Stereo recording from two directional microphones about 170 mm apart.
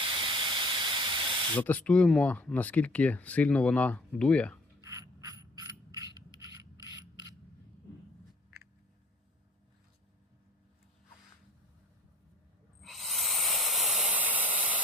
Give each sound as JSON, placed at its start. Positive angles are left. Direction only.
{"t": 0.0, "sound": "steam", "side_deg": -30}
{"t": 1.5, "sound": "speech", "side_deg": 10}
{"t": 4.8, "sound": "mechanisms", "side_deg": -20}
{"t": 12.8, "sound": "hiss", "side_deg": 0}